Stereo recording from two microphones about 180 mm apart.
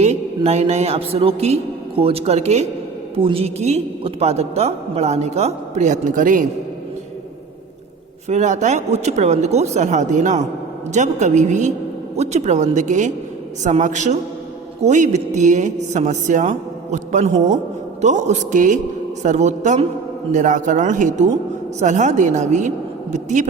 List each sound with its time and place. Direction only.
0.0 s a woman's voice: 35° right (ahead or behind)
8.3 s a woman's voice: 40° right (ahead or behind)